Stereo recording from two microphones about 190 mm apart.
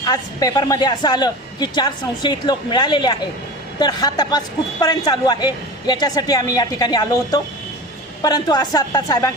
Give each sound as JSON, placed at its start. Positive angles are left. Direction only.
{"t": 0.0, "sound": "a man's voice", "side_deg": 20}